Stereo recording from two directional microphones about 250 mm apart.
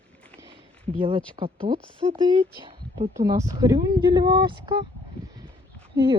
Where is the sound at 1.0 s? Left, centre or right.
Centre.